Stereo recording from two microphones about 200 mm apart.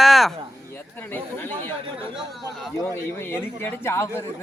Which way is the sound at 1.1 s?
10° left (ahead or behind).